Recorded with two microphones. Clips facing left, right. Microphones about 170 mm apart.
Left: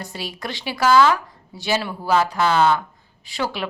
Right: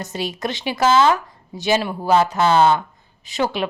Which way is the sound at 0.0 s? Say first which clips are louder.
Right 5 dB; 20° right (ahead or behind).